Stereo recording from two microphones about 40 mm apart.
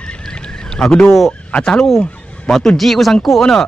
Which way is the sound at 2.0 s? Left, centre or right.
Left.